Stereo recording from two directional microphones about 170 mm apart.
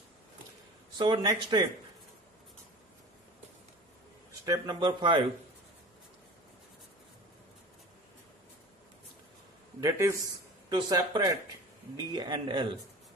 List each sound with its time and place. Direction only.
0.9 s speech: 25° right (ahead or behind)
4.3 s speech: 25° right (ahead or behind)
9.8 s a man's voice: 20° right (ahead or behind)